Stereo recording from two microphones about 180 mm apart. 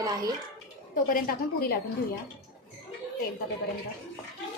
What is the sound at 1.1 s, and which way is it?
Speech, 55° left (ahead or behind).